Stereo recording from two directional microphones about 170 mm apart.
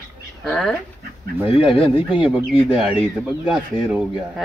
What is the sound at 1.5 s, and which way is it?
Speech, 35° left (ahead or behind).